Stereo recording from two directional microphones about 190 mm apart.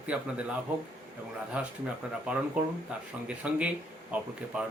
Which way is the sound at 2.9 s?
5° right (ahead or behind).